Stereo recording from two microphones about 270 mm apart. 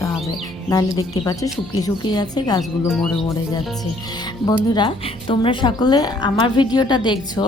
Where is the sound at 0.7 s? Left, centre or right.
Centre.